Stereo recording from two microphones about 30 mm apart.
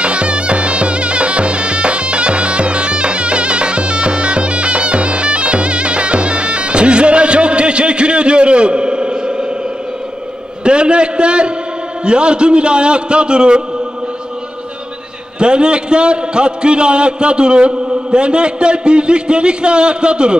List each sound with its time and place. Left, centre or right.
0.0 s music: right
10.6 s a sound: right
12.0 s a man's voice: right
15.3 s a man's voice: right